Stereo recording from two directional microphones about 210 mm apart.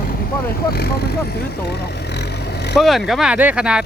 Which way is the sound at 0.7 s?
50° left (ahead or behind).